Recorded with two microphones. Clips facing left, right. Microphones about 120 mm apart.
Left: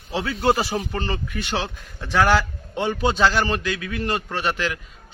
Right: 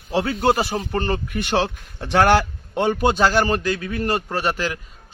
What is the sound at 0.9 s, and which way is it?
A man's voice, 50° right (ahead or behind).